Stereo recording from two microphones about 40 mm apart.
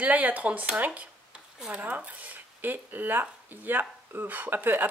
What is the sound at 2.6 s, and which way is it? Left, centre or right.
Speech, right.